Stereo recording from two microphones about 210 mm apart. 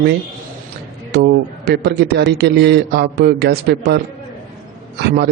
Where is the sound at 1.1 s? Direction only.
50° right (ahead or behind).